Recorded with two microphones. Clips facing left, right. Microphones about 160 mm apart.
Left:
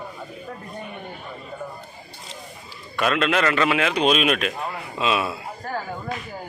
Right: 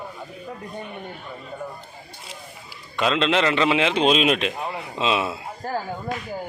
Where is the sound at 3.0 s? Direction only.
20° right (ahead or behind).